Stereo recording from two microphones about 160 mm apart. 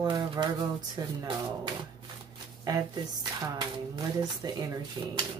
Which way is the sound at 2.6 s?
25° right (ahead or behind).